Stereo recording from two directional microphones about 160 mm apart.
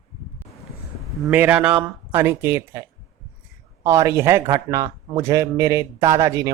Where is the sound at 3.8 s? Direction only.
20° right (ahead or behind).